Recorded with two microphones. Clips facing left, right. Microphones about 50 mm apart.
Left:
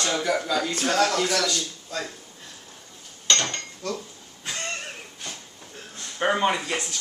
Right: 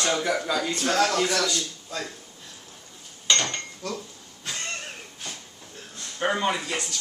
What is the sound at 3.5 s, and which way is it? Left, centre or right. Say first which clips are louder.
Cutlery: left 1 dB; centre.